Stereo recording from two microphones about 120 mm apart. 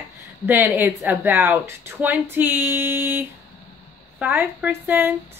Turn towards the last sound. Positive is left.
turn(degrees=-15)  # may be behind; listen again after turning